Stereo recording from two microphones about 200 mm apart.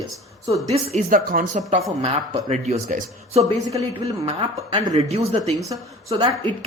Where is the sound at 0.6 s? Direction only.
35° right (ahead or behind).